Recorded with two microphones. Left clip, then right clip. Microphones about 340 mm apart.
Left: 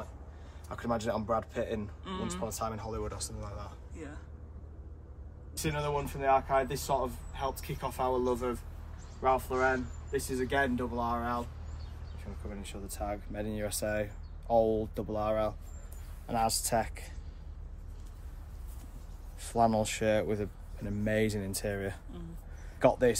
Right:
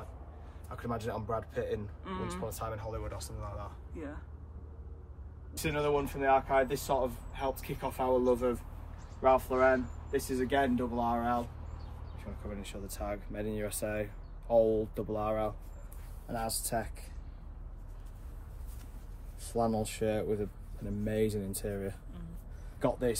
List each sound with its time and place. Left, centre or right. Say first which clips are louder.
0.7 s a man's voice: left 4 dB; centre
2.0 s speech: even; centre
2.4 s speech: left 2 dB; centre
5.6 s speech: right 2 dB; centre
12.4 s speech: right 1 dB; centre
19.4 s speech: left 4 dB; centre